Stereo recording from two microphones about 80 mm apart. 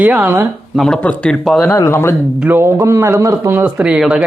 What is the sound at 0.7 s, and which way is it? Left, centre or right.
Speech, centre.